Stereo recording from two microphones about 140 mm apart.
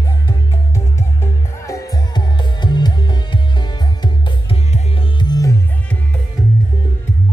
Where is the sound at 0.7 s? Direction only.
20° left (ahead or behind).